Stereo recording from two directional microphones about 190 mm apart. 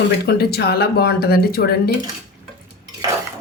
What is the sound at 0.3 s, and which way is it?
Speech, 55° left (ahead or behind).